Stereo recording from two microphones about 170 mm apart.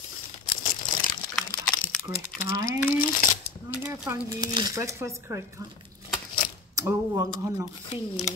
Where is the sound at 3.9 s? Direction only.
20° right (ahead or behind).